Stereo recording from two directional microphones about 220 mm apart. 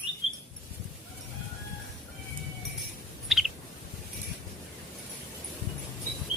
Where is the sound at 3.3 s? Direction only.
Centre (ahead or behind).